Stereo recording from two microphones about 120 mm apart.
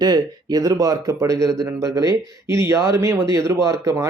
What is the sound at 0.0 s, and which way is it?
Speech, 35° right (ahead or behind).